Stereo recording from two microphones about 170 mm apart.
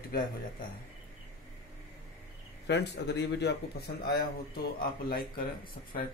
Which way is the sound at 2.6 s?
90° left.